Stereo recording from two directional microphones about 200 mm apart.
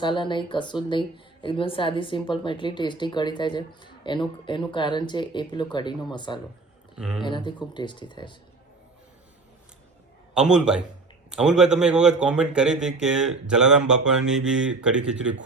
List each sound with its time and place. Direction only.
0.0 s speech: 25° left (ahead or behind)
6.9 s a man's voice: 5° right (ahead or behind)
7.3 s speech: 25° left (ahead or behind)
10.3 s a man's voice: 5° right (ahead or behind)